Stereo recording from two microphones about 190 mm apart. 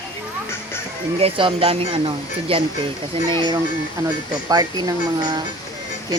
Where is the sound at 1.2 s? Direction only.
30° right (ahead or behind).